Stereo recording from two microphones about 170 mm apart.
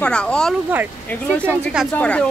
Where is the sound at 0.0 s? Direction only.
5° left (ahead or behind).